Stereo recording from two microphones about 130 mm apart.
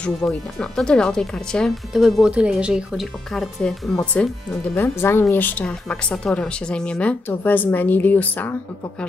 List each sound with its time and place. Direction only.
0.0 s speech: 5° left (ahead or behind)
4.7 s speech: 20° left (ahead or behind)